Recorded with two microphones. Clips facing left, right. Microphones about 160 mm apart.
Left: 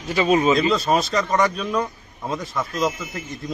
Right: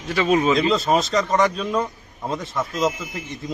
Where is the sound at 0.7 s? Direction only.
20° right (ahead or behind).